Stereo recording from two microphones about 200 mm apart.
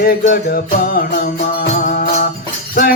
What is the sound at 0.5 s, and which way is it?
Music, 50° left (ahead or behind).